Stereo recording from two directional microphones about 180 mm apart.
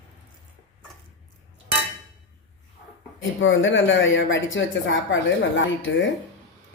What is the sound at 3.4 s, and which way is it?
A woman's voice, 90° left.